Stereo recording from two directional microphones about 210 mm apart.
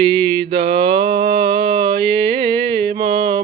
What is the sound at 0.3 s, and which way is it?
Mantra, 25° right (ahead or behind).